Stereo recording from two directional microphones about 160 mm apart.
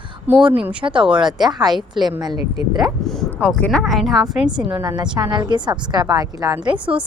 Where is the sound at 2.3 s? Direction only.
35° left (ahead or behind).